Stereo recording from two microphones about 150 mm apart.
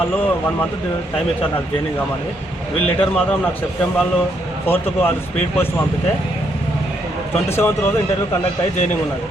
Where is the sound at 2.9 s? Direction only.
10° left (ahead or behind).